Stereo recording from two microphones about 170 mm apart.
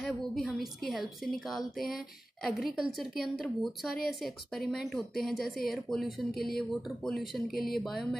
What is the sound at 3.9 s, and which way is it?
Speech, 65° left (ahead or behind).